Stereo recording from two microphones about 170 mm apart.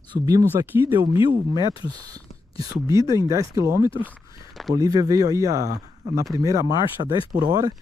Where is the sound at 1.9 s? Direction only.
20° right (ahead or behind).